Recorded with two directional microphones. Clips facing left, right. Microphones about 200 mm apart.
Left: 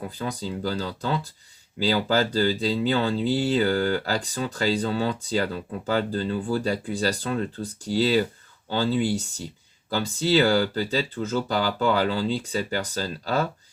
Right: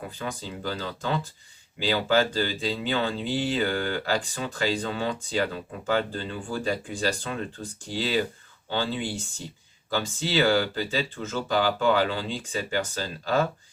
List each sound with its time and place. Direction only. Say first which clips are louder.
0.2 s speech: left 5 dB; 35° left (ahead or behind)